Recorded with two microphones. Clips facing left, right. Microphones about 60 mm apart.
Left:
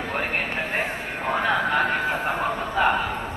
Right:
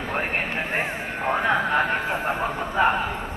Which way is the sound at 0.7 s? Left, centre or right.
Right.